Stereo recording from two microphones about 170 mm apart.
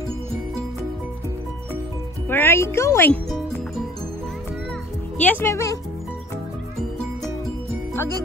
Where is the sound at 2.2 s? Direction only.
10° left (ahead or behind).